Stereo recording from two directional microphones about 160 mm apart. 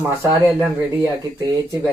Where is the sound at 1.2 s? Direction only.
25° right (ahead or behind).